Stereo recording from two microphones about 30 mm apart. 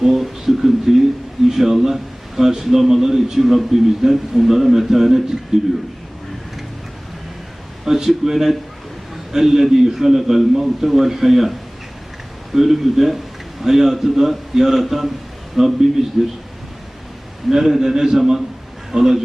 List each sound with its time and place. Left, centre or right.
0.0 s a sound: centre
1.5 s a man's voice: centre
7.9 s a man's voice: centre
12.5 s a man's voice: centre
16.1 s speech: centre
17.5 s a man's voice: centre
18.2 s a man's voice: centre